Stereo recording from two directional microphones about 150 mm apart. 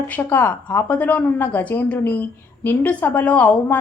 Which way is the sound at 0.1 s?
10° left (ahead or behind).